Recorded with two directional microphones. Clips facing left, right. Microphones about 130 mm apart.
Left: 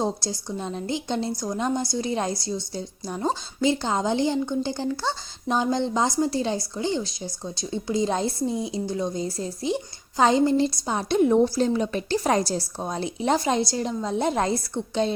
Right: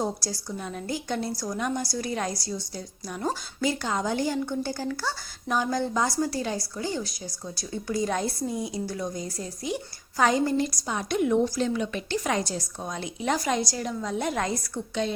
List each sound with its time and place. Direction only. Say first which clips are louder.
0.0 s a woman's voice: left 3 dB; 25° left (ahead or behind)